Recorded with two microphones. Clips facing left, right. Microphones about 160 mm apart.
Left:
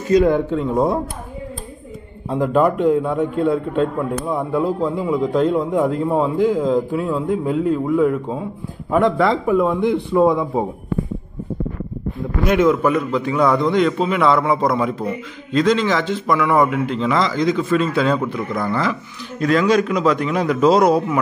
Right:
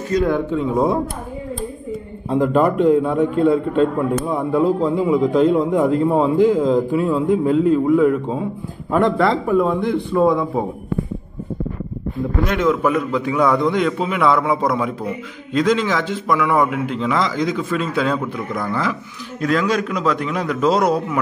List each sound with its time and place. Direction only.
2.2 s a man's voice: 5° left (ahead or behind)
12.2 s a man's voice: centre (ahead or behind)